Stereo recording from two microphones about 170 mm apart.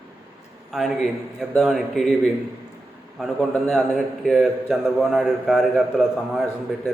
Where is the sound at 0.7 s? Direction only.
Centre (ahead or behind).